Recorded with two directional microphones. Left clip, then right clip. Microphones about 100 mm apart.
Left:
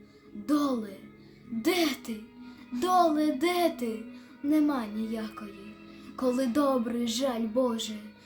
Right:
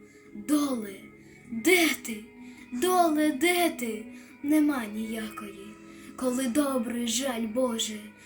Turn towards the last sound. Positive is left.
turn(degrees=40)  # may be behind; listen again after turning